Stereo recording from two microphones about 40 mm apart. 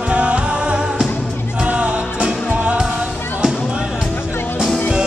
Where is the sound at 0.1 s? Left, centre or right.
Right.